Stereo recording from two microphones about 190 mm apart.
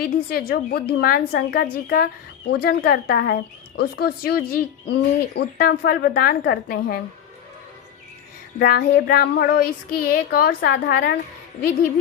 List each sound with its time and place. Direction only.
0.0 s child singing: 55° left (ahead or behind)
2.5 s speech: 55° left (ahead or behind)
8.5 s child singing: 50° left (ahead or behind)